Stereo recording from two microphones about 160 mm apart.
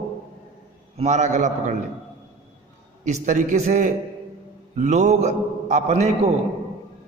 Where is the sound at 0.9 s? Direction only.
45° right (ahead or behind).